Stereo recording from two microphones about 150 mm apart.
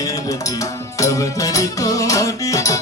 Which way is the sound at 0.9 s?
20° left (ahead or behind).